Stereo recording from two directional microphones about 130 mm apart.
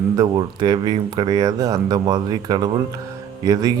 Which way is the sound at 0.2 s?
35° right (ahead or behind).